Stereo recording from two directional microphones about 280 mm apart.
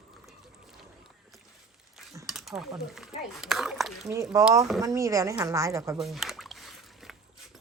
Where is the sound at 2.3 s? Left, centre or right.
Centre.